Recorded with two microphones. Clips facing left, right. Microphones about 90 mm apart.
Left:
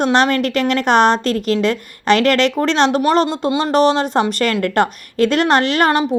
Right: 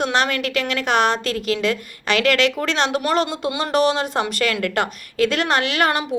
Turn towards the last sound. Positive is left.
turn(degrees=30)  # may be behind; listen again after turning